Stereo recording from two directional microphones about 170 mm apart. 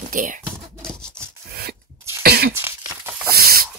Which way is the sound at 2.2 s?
65° right (ahead or behind).